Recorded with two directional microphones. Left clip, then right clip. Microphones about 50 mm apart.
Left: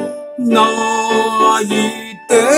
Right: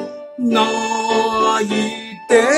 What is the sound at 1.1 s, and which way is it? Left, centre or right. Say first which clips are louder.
Music: left 1 dB; left.